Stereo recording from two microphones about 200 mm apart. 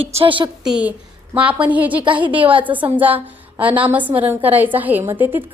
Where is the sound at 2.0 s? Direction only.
25° right (ahead or behind).